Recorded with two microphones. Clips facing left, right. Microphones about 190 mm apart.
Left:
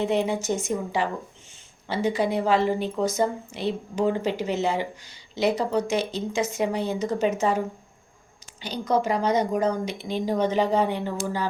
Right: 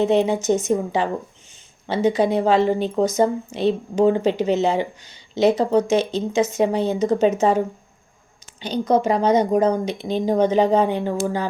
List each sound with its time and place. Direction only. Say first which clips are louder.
0.0 s speech: right 6 dB; 20° right (ahead or behind)
8.6 s speech: right 5 dB; 20° right (ahead or behind)